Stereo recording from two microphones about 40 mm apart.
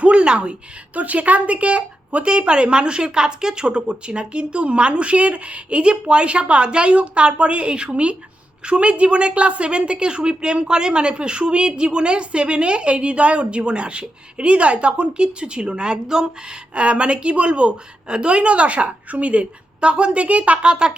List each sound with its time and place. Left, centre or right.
0.0 s a sound: right
0.9 s a woman's voice: right; by 16.3 s centre
16.7 s a woman's voice: right
20.6 s a woman's voice: right